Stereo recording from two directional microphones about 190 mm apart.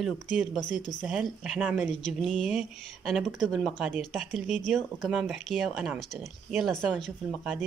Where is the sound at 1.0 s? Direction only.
5° right (ahead or behind).